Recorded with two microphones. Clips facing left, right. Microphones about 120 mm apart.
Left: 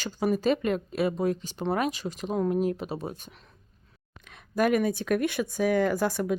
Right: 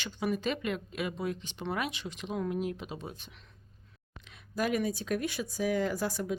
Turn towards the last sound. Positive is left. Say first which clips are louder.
# left 6 dB
turn(degrees=60)  # may be behind; listen again after turning